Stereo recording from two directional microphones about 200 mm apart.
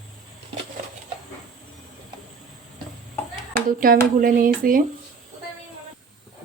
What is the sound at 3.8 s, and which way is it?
Speech, 45° right (ahead or behind).